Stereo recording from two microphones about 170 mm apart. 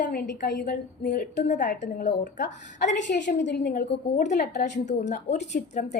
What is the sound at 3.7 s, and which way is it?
Speech, 45° left (ahead or behind).